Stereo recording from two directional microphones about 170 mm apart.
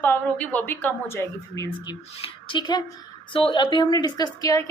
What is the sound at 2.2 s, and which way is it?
A woman's voice, 30° left (ahead or behind).